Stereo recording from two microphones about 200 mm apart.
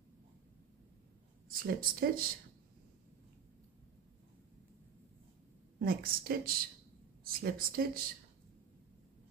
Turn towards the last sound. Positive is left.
turn(degrees=-50)  # may be behind; listen again after turning